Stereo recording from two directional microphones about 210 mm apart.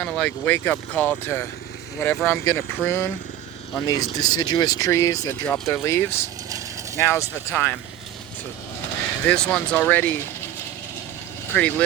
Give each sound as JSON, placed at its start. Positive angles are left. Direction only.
{"t": 0.0, "sound": "speech", "side_deg": 5}
{"t": 9.2, "sound": "speech", "side_deg": 5}
{"t": 11.5, "sound": "speech", "side_deg": 5}